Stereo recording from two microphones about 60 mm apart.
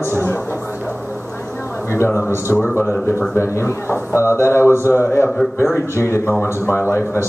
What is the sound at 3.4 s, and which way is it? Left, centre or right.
Speech, left.